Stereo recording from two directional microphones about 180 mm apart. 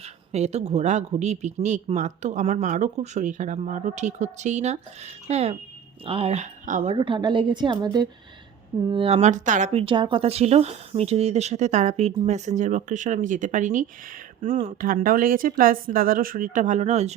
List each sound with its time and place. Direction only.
0.0 s a woman's voice: 35° right (ahead or behind)